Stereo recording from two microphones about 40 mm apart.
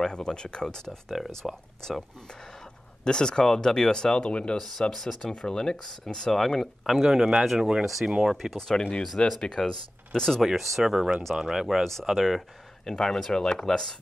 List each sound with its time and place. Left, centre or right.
0.0 s speech: centre
3.0 s speech: left
6.9 s speech: centre
8.5 s speech: centre
10.5 s speech: centre
11.8 s speech: centre